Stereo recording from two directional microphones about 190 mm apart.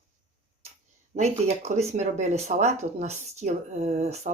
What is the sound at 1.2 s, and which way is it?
Speech, 35° right (ahead or behind).